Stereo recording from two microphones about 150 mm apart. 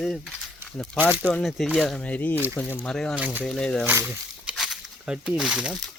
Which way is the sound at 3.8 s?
15° right (ahead or behind).